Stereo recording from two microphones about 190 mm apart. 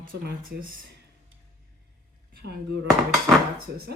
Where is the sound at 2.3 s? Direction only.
60° right (ahead or behind).